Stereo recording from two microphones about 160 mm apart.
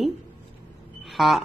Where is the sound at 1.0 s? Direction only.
Centre (ahead or behind).